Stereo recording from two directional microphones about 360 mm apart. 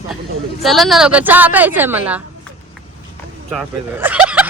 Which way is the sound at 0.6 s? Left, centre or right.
Centre.